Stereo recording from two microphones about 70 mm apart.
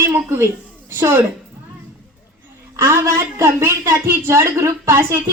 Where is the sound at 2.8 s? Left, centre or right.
Right.